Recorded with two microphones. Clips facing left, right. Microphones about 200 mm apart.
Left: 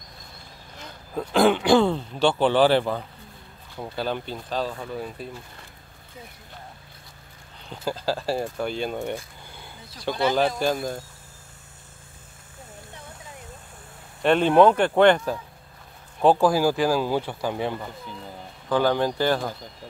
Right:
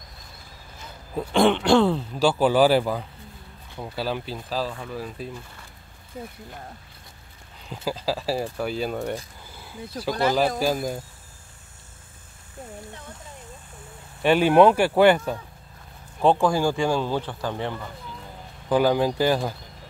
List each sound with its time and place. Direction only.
1.1 s speech: centre (ahead or behind)
7.7 s speech: 5° right (ahead or behind)
9.5 s a sound: centre (ahead or behind)
10.2 s speech: 5° right (ahead or behind)
14.2 s speech: 5° right (ahead or behind); by 17.8 s 15° left (ahead or behind)
18.7 s speech: 10° right (ahead or behind)